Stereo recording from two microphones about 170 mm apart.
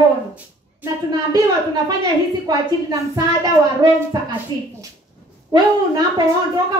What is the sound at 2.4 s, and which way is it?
A woman's voice, 20° right (ahead or behind).